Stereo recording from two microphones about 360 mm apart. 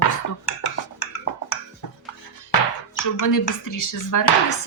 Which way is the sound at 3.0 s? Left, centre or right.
Left.